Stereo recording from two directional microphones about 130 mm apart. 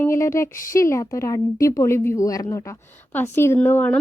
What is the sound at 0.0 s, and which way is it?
A woman's voice, 20° left (ahead or behind).